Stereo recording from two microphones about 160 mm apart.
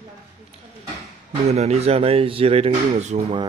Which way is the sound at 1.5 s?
40° right (ahead or behind).